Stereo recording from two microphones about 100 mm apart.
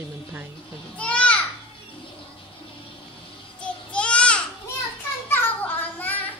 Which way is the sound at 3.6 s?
10° left (ahead or behind).